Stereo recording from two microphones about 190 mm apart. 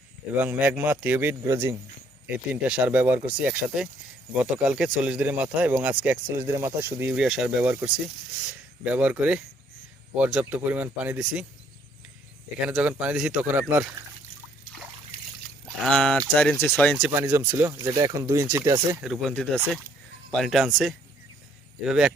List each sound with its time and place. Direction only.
0.3 s speech: 10° right (ahead or behind)
12.6 s speech: 5° right (ahead or behind)
15.8 s speech: 5° left (ahead or behind)
17.2 s speech: 10° right (ahead or behind)
19.0 s speech: centre (ahead or behind)